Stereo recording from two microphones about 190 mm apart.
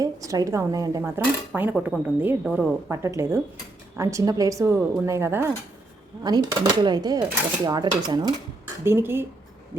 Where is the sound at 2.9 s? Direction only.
15° right (ahead or behind).